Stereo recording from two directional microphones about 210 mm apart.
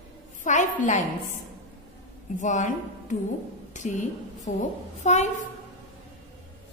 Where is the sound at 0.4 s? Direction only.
35° left (ahead or behind).